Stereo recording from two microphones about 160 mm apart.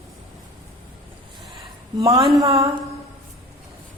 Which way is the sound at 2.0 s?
20° right (ahead or behind).